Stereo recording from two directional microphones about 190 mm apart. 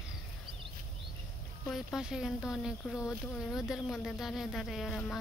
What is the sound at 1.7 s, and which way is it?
Speech, centre (ahead or behind).